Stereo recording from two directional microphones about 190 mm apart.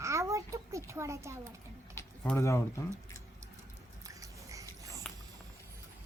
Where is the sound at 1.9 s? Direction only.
15° left (ahead or behind).